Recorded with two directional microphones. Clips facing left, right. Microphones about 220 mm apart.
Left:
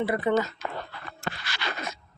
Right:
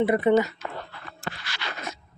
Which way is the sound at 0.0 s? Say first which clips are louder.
Right 5 dB; 20° right (ahead or behind).